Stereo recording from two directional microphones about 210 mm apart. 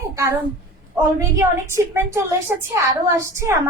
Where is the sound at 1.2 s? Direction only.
10° right (ahead or behind).